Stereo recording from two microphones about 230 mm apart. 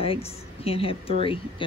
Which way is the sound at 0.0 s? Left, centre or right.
Left.